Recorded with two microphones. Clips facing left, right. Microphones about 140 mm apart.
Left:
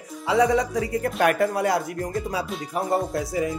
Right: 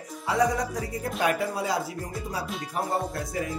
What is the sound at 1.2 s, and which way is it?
Speech, 60° left (ahead or behind).